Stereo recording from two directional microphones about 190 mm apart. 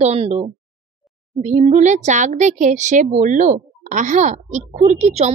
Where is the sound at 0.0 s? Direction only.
35° right (ahead or behind).